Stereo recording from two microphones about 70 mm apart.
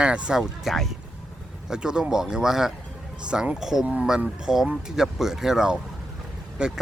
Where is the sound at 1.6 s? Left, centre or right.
Centre.